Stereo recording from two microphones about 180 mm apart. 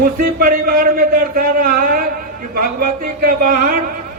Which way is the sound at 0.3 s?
50° right (ahead or behind).